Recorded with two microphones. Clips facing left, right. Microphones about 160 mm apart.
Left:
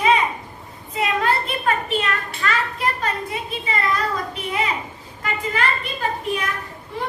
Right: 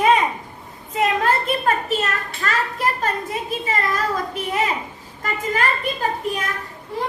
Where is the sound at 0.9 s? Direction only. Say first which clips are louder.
Right 2 dB; 45° right (ahead or behind).